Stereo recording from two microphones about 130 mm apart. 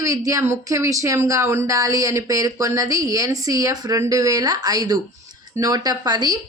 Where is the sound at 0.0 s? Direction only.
25° right (ahead or behind).